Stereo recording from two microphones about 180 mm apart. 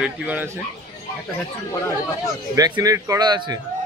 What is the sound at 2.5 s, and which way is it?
Speech, 20° right (ahead or behind).